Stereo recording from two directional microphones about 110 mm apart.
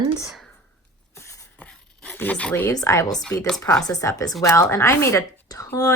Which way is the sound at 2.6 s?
25° left (ahead or behind).